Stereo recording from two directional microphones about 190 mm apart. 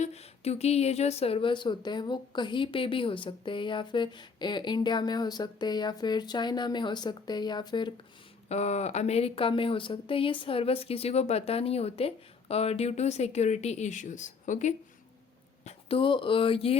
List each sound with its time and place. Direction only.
0.0 s speech: 35° left (ahead or behind)
8.4 s speech: 35° left (ahead or behind)
15.6 s speech: 30° left (ahead or behind)